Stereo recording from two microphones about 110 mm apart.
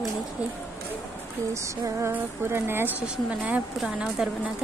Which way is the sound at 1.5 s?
30° right (ahead or behind).